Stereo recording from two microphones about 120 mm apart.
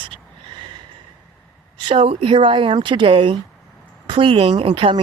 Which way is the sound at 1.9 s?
45° right (ahead or behind).